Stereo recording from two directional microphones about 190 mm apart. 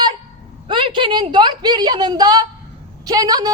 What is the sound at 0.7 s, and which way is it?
A woman's voice, 25° right (ahead or behind).